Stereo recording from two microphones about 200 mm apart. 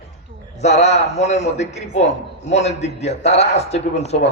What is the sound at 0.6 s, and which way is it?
A man's voice, 35° left (ahead or behind).